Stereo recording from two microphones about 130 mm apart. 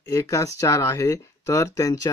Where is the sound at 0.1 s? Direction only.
25° left (ahead or behind).